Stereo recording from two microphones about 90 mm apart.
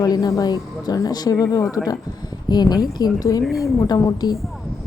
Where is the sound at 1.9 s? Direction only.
50° left (ahead or behind).